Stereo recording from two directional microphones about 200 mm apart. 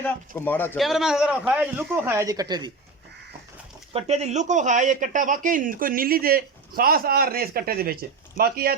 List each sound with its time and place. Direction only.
0.0 s speech: 10° left (ahead or behind)
0.8 s a man's voice: centre (ahead or behind); by 2.7 s 20° right (ahead or behind)
3.9 s speech: 30° right (ahead or behind); by 8.7 s 50° right (ahead or behind)